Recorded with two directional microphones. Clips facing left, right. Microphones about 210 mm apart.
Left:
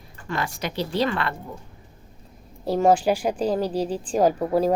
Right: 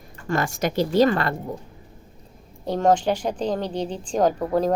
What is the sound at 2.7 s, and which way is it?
Speech, 5° left (ahead or behind).